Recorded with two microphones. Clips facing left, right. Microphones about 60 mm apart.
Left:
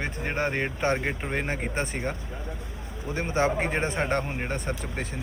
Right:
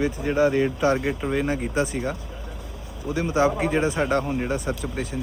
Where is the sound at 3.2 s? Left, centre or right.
Left.